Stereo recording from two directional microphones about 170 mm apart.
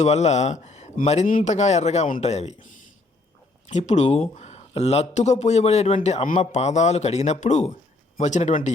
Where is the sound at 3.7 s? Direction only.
40° left (ahead or behind).